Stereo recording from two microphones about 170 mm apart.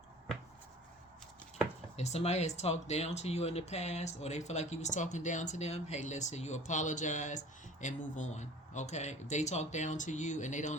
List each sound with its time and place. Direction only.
2.0 s speech: 40° left (ahead or behind)